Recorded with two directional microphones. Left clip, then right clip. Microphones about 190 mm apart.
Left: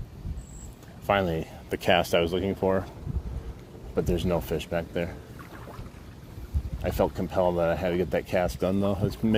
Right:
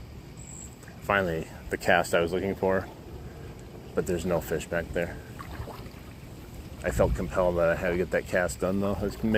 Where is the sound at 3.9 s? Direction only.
65° left (ahead or behind).